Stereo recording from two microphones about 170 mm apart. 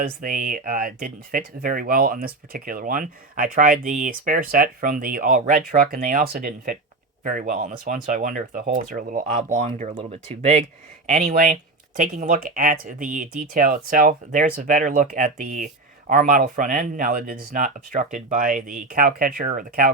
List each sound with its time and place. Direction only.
0.0 s speech: 55° right (ahead or behind)